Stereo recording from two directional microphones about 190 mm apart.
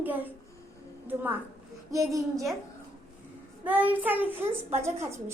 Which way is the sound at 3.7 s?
10° right (ahead or behind).